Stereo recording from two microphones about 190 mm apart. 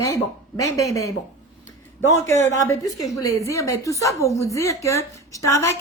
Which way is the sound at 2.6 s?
15° left (ahead or behind).